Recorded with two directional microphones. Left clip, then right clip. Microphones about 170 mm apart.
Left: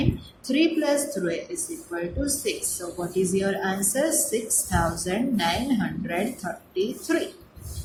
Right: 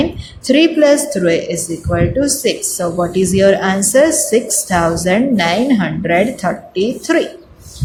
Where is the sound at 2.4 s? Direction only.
45° right (ahead or behind).